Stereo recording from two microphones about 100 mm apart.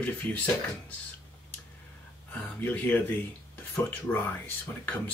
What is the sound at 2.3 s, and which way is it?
Speech, 20° left (ahead or behind).